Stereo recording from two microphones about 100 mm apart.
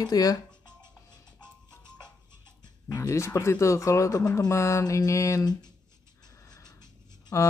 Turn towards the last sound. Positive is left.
turn(degrees=30)  # may be behind; listen again after turning